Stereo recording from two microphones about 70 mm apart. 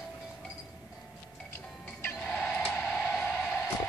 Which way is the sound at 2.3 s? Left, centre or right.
Centre.